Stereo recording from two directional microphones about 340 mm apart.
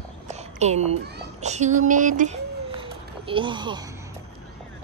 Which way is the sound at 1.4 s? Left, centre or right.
Centre.